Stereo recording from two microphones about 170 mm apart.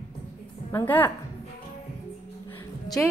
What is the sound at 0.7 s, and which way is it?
Speech, 10° left (ahead or behind).